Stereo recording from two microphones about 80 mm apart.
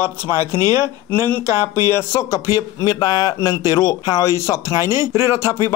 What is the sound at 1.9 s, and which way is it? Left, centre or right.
Speech, left.